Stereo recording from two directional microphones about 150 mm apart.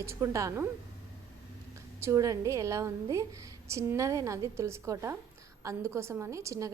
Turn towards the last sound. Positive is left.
turn(degrees=-20)  # may be behind; listen again after turning